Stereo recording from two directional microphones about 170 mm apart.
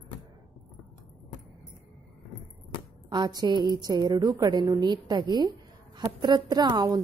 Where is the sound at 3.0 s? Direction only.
25° right (ahead or behind).